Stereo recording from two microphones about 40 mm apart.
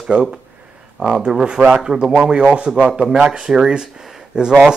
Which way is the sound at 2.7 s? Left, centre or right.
Right.